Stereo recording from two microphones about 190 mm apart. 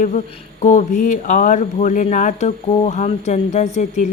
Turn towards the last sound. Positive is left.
turn(degrees=40)  # may be behind; listen again after turning